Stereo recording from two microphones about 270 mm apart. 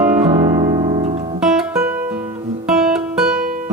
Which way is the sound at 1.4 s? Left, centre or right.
Centre.